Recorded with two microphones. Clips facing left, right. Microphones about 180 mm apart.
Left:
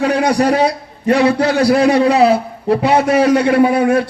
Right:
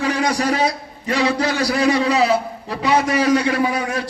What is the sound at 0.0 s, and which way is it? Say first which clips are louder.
A man's voice: left 6 dB; 60° left (ahead or behind).